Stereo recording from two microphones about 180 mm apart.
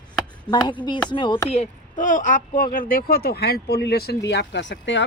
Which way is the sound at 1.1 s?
25° left (ahead or behind).